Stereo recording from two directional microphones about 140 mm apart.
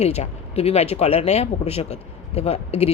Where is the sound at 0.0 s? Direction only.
50° left (ahead or behind).